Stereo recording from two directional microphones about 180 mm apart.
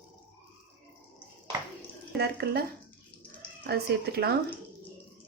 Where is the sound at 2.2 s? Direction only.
60° right (ahead or behind).